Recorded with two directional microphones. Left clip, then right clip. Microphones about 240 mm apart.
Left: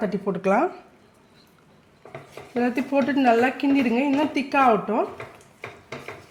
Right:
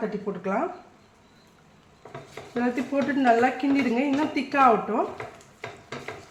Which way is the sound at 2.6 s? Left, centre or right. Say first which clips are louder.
Left 3 dB; left.